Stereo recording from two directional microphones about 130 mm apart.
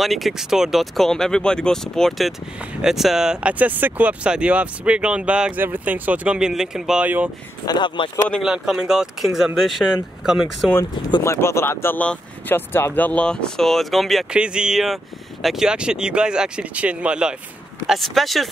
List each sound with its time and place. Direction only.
0.0 s speech: centre (ahead or behind)
7.6 s speech: 35° left (ahead or behind)
8.4 s speech: 5° right (ahead or behind)
11.2 s speech: 20° left (ahead or behind); by 18.5 s centre (ahead or behind)